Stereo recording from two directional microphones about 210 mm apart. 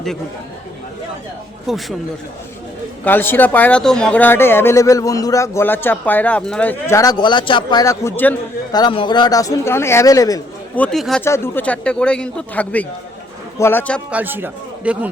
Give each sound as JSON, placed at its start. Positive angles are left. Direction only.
{"t": 3.0, "sound": "speech", "side_deg": 10}
{"t": 8.7, "sound": "speech", "side_deg": 25}
{"t": 10.8, "sound": "speech", "side_deg": 0}
{"t": 14.1, "sound": "a man's voice", "side_deg": -10}